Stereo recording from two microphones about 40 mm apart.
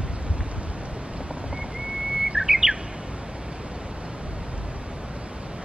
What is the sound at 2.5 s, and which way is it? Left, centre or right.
Chirp, right.